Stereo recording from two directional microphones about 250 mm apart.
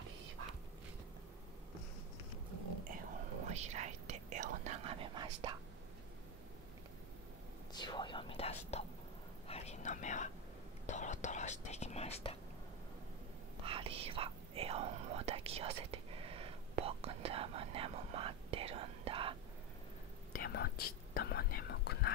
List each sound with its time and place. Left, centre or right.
3.5 s whispering: right
7.7 s whispering: centre
13.7 s whispering: right
20.3 s whispering: left